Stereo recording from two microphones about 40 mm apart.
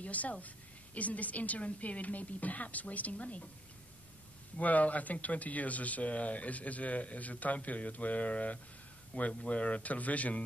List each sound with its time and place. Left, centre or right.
0.0 s a woman's voice: left
4.6 s speech: left